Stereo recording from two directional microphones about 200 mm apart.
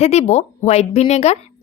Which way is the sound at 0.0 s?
35° left (ahead or behind).